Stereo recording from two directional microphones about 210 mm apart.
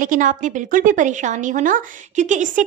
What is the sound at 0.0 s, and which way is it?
A woman's voice, 40° right (ahead or behind).